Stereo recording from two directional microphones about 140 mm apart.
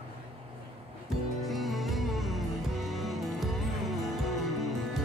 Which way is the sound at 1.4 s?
Centre (ahead or behind).